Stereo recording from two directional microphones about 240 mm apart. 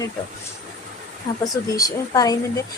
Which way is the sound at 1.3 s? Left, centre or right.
Centre.